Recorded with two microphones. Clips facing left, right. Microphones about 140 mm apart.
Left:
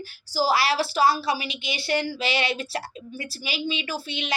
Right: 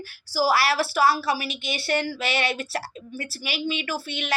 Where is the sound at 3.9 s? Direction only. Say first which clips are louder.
Right 1 dB; 55° right (ahead or behind).